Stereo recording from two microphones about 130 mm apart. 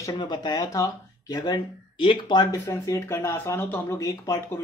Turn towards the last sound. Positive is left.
turn(degrees=25)  # may be behind; listen again after turning